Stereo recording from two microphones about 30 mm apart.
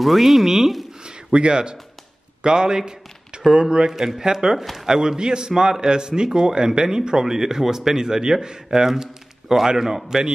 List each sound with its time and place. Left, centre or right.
0.0 s speech: centre
1.0 s a sound: right
2.4 s speech: right
3.9 s speech: centre
4.2 s speech: right